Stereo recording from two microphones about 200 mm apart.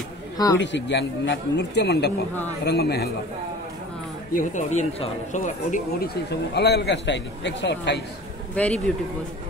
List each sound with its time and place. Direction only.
0.6 s a man's voice: 65° left (ahead or behind)
4.4 s speech: 35° left (ahead or behind); by 8.0 s 60° left (ahead or behind)
8.5 s speech: 5° left (ahead or behind)